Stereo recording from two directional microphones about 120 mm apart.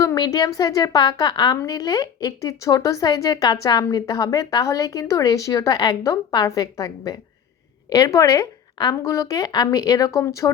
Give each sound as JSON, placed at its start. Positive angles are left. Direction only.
{"t": 0.0, "sound": "a woman's voice", "side_deg": 30}